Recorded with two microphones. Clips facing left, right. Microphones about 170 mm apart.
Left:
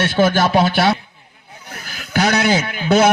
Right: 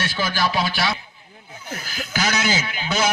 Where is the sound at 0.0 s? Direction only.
55° left (ahead or behind).